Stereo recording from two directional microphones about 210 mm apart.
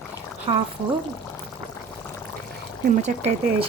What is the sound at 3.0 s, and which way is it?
Speech, 30° right (ahead or behind).